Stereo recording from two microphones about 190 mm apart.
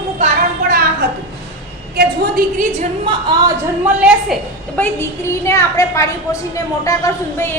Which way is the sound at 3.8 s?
5° right (ahead or behind).